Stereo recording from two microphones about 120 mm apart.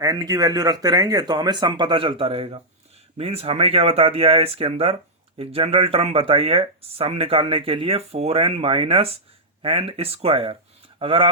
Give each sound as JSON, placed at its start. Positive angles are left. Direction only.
{"t": 0.0, "sound": "speech", "side_deg": -30}